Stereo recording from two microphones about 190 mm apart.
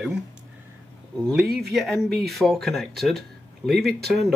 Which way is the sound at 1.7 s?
Centre (ahead or behind).